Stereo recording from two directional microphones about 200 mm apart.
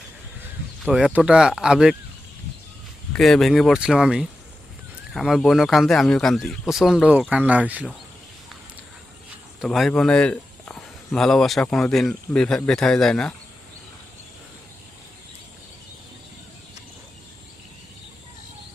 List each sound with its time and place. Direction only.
0.9 s speech: 5° right (ahead or behind)
3.1 s speech: 5° left (ahead or behind)
9.6 s speech: centre (ahead or behind)